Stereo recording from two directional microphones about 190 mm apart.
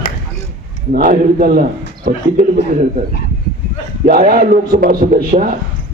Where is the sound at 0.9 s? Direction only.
50° right (ahead or behind).